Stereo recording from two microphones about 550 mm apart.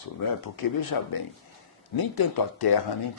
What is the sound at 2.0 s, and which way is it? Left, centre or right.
Speech, left.